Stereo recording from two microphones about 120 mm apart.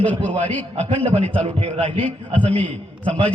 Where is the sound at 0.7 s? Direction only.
65° right (ahead or behind).